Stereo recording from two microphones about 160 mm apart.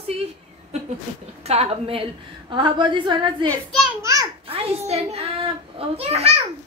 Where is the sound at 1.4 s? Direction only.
40° right (ahead or behind).